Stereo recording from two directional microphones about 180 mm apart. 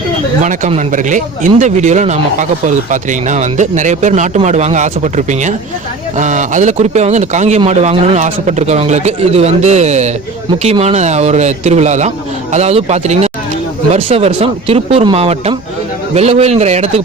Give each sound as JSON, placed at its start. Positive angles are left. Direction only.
{"t": 0.7, "sound": "speech", "side_deg": -45}